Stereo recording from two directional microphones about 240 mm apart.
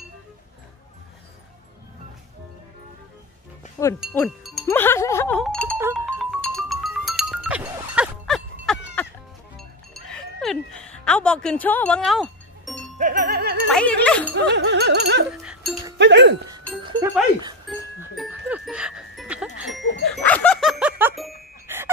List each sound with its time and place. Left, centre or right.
3.6 s wind chime: left
4.1 s speech: centre
4.6 s music: centre
9.6 s chink: centre
12.9 s music: right
13.7 s speech: centre
14.3 s music: right
15.4 s music: centre
16.0 s speech: right
16.4 s a sound: centre
17.6 s music: centre
20.0 s dog: centre
21.2 s music: centre